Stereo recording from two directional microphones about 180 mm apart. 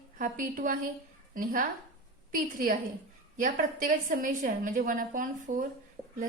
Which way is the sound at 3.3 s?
45° right (ahead or behind).